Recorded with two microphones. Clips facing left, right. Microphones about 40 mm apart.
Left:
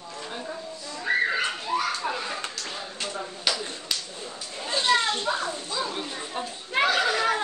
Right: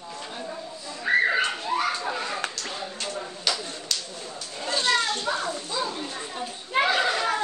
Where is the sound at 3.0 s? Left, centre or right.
Centre.